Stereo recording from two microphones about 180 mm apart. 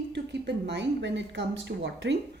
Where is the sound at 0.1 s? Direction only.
70° right (ahead or behind).